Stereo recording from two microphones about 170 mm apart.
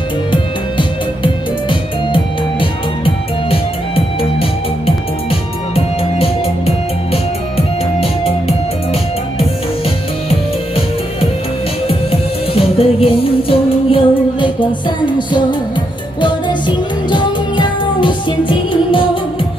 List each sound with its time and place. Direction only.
0.3 s music: 30° left (ahead or behind)
6.1 s music: 35° left (ahead or behind)
11.9 s music: 35° left (ahead or behind)